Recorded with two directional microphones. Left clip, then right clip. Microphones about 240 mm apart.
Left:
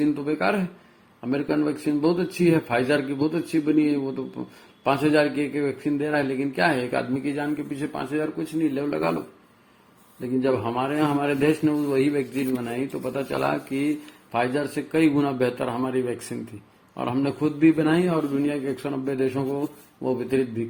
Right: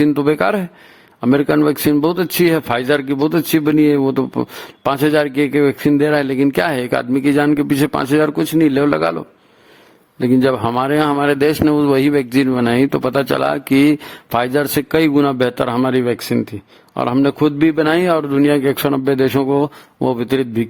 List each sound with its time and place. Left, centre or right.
0.0 s a man's voice: right
10.2 s a man's voice: right